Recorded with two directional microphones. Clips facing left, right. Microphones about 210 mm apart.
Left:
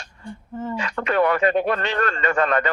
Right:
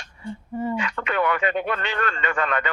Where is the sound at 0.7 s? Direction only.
40° left (ahead or behind).